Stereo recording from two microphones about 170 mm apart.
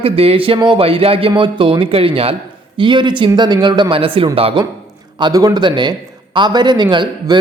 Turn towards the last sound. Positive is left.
turn(degrees=-30)  # may be behind; listen again after turning